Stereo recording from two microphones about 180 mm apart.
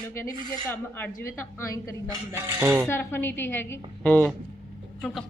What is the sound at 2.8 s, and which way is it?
A woman's voice, 10° left (ahead or behind).